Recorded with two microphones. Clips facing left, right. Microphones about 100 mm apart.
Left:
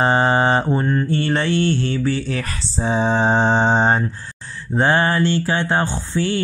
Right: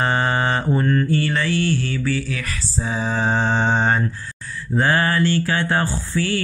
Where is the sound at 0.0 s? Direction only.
25° left (ahead or behind).